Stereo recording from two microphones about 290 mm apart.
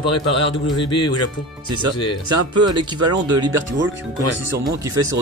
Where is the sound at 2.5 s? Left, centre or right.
Centre.